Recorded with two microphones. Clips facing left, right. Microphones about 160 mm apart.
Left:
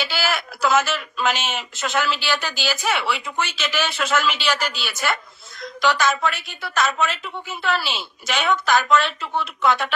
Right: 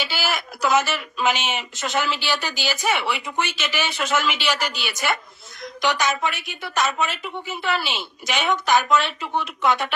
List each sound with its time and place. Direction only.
0.0 s speech: 15° right (ahead or behind)